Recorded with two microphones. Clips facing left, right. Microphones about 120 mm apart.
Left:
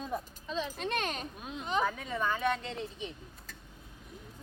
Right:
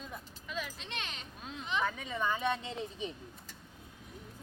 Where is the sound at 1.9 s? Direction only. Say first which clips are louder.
Left 2 dB; centre (ahead or behind).